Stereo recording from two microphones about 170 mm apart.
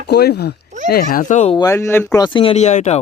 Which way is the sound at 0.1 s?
75° left (ahead or behind).